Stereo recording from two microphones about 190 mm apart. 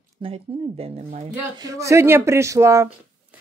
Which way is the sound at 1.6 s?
15° right (ahead or behind).